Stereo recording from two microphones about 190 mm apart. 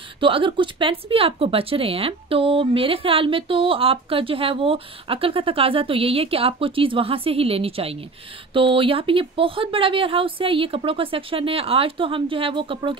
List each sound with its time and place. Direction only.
0.2 s speech: 25° right (ahead or behind)